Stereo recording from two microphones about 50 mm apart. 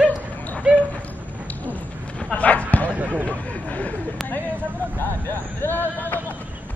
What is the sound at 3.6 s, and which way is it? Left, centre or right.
Speech, left.